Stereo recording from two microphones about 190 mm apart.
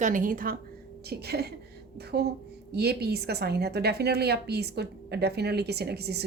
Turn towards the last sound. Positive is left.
turn(degrees=-60)  # may be behind; listen again after turning